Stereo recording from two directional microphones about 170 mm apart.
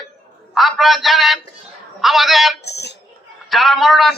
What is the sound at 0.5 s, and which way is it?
A man's voice, centre (ahead or behind).